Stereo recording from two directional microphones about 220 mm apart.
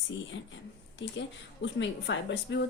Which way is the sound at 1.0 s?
55° left (ahead or behind).